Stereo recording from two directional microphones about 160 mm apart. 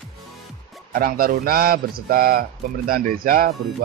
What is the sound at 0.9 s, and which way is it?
Speech, 65° right (ahead or behind).